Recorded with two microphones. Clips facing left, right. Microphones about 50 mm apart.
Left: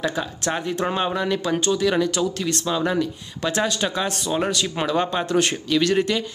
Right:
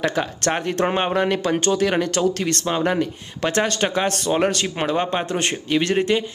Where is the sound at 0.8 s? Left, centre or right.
Right.